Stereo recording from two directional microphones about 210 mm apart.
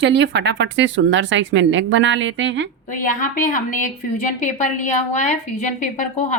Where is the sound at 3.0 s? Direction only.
40° left (ahead or behind).